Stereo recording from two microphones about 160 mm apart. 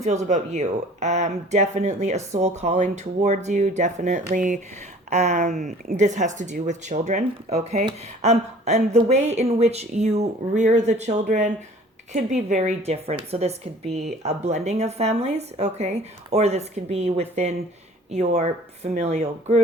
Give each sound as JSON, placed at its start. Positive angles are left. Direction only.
{"t": 0.0, "sound": "a woman's voice", "side_deg": -45}